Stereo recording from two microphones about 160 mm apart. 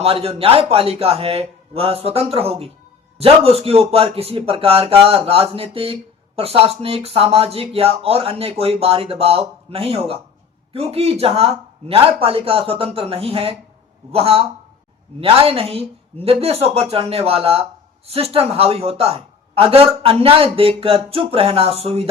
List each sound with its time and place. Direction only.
0.0 s a man's voice: 40° right (ahead or behind)